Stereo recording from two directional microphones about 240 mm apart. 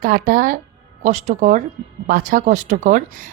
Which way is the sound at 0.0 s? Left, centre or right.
Right.